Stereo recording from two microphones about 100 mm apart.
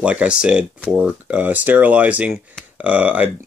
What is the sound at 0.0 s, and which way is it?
Speech, 15° right (ahead or behind).